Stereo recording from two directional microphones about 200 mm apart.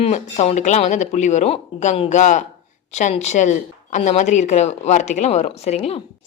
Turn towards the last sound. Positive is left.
turn(degrees=30)  # may be behind; listen again after turning